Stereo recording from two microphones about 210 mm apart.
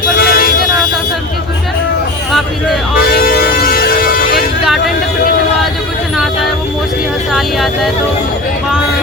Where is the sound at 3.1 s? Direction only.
45° left (ahead or behind).